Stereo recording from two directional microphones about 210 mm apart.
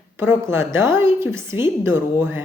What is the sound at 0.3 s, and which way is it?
A woman's voice, 10° right (ahead or behind).